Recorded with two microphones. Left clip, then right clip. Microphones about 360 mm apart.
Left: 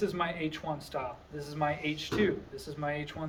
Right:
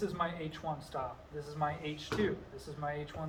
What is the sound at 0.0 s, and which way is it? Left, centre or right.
A man's voice, left.